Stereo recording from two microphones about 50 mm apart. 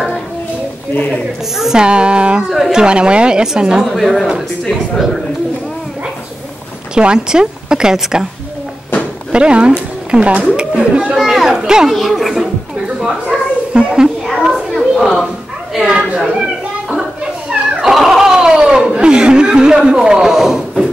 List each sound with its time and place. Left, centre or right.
1.6 s speech: centre
3.8 s speech: centre
7.0 s speech: centre
9.3 s a woman's voice: right
11.1 s speech: centre
11.9 s speech: centre
12.8 s a sound: centre
14.4 s chatter: centre
15.7 s a sound: centre